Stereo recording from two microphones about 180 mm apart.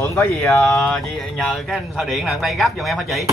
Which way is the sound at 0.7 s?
5° left (ahead or behind).